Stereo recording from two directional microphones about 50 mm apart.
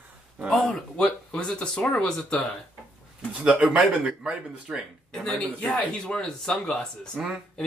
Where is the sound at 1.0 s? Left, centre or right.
Left.